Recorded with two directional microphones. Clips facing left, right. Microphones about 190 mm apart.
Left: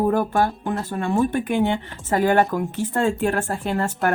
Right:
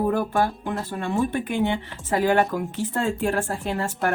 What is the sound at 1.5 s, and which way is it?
A woman's voice, 50° left (ahead or behind).